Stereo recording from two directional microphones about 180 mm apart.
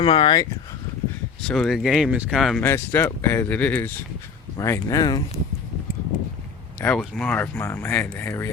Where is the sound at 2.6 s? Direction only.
10° left (ahead or behind).